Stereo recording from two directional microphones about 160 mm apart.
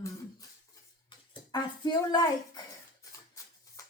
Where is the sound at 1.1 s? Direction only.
30° left (ahead or behind).